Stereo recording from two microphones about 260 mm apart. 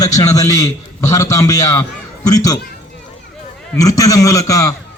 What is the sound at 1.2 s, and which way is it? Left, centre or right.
Speech, centre.